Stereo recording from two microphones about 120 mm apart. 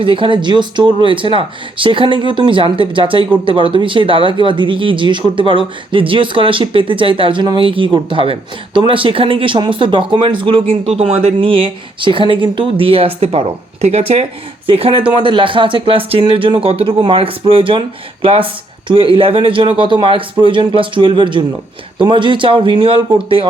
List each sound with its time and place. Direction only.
0.0 s speech: 45° right (ahead or behind)